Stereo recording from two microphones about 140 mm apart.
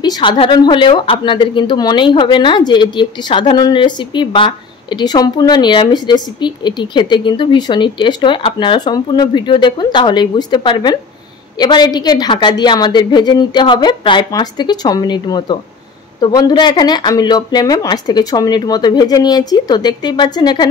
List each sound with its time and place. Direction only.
0.0 s speech: 30° left (ahead or behind)